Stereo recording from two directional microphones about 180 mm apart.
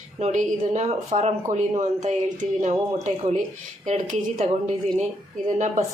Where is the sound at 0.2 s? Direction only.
40° right (ahead or behind).